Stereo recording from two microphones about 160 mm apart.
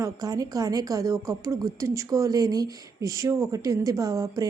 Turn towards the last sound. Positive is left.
turn(degrees=-20)  # may be behind; listen again after turning